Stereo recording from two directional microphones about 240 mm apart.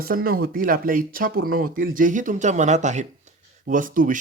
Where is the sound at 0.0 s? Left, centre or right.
Right.